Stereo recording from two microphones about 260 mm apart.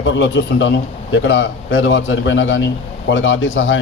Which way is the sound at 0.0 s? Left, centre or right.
Left.